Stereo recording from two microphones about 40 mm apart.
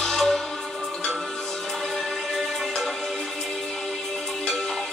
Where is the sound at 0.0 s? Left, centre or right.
Centre.